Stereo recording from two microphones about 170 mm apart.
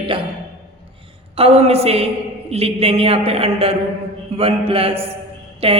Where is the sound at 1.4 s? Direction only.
35° right (ahead or behind).